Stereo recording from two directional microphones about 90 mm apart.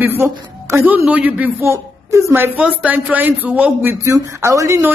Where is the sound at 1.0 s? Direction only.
15° right (ahead or behind).